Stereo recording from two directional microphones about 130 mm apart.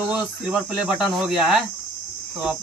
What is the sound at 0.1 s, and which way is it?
Speech, 5° right (ahead or behind).